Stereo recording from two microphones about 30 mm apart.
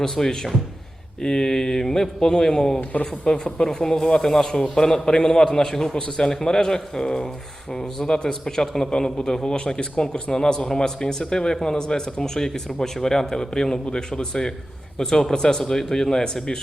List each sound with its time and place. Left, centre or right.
0.0 s a man's voice: centre
8.9 s a man's voice: left